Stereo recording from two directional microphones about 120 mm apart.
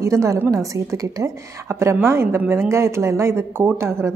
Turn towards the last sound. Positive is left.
turn(degrees=-20)  # may be behind; listen again after turning